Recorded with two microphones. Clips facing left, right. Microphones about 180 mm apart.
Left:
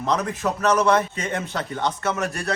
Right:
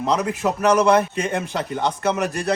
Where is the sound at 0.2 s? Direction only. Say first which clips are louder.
Right 3 dB; 10° right (ahead or behind).